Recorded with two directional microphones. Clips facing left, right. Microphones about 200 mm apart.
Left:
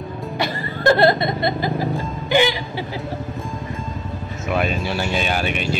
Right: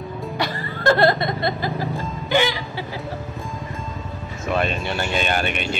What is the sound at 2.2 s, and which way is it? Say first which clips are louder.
Music: left 3 dB; 15° left (ahead or behind).